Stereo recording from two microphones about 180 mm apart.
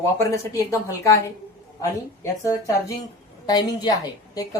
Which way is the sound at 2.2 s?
15° left (ahead or behind).